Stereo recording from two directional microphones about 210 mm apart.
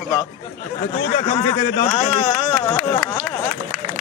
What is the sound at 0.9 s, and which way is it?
Speech, 25° left (ahead or behind).